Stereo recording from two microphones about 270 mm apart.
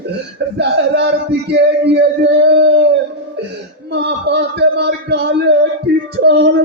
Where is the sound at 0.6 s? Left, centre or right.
Right.